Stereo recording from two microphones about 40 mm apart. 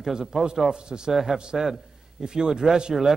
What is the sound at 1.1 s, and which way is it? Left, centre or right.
Speech, centre.